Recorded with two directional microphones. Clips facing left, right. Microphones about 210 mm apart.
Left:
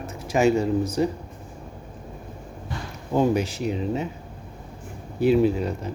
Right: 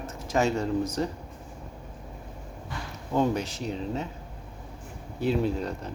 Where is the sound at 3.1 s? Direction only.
10° left (ahead or behind).